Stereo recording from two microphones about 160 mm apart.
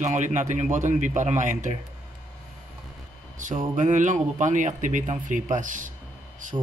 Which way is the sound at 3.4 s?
50° right (ahead or behind).